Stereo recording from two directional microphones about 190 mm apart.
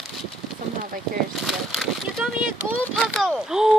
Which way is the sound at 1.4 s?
Centre (ahead or behind).